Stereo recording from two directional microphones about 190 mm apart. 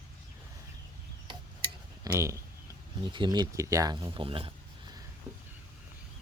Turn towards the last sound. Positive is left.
turn(degrees=-25)  # may be behind; listen again after turning